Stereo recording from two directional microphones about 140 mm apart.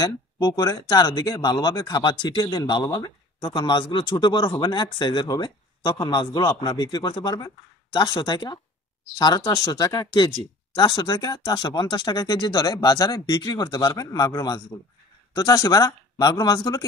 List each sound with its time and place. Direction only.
0.0 s speech: 25° left (ahead or behind)